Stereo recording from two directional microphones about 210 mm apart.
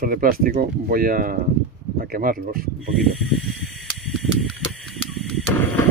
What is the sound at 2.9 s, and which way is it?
Snake, centre (ahead or behind).